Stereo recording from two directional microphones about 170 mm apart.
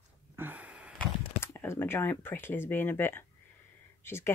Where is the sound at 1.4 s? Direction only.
15° left (ahead or behind).